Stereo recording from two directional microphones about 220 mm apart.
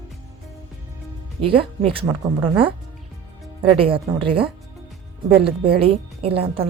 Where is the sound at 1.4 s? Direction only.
25° right (ahead or behind).